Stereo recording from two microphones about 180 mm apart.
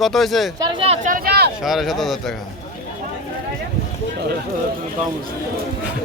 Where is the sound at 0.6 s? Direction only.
25° right (ahead or behind); by 1.5 s 60° right (ahead or behind).